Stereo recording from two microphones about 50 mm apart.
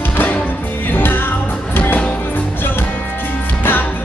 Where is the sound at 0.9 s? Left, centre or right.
Left.